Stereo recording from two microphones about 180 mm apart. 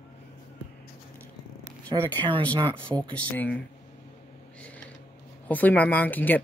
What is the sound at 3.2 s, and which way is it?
Speech, 10° left (ahead or behind).